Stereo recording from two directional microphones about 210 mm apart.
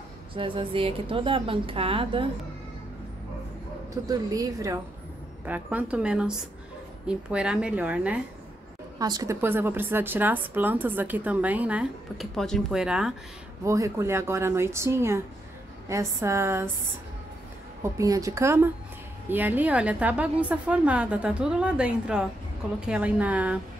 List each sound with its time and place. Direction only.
0.3 s a woman's voice: 25° right (ahead or behind)
4.1 s a woman's voice: 15° right (ahead or behind)
8.9 s a woman's voice: 20° right (ahead or behind)
13.7 s a woman's voice: 15° right (ahead or behind)
17.8 s a woman's voice: 15° right (ahead or behind)